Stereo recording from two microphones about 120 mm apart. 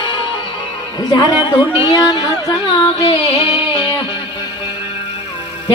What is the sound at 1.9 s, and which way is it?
Speech, 30° left (ahead or behind).